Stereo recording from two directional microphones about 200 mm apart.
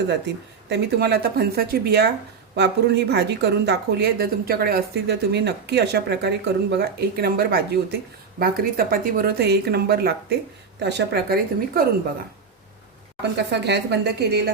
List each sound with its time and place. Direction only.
0.7 s speech: 55° right (ahead or behind)
13.3 s speech: 60° right (ahead or behind)